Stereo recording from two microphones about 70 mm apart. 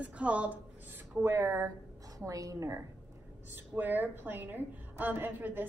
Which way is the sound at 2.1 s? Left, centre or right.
Right.